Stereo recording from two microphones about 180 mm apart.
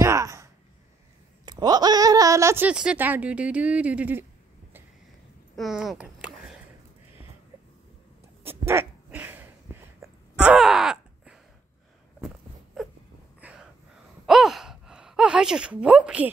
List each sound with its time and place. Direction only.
0.0 s a sound: 15° right (ahead or behind)
1.4 s speech: 20° right (ahead or behind)
5.6 s a sound: centre (ahead or behind)
8.5 s dog: 15° right (ahead or behind)
13.4 s gasp: 5° right (ahead or behind)
14.2 s sigh: centre (ahead or behind)